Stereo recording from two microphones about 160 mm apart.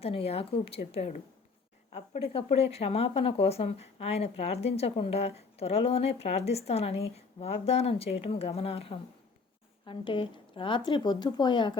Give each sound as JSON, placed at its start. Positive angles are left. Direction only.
{"t": 0.0, "sound": "a woman's voice", "side_deg": 35}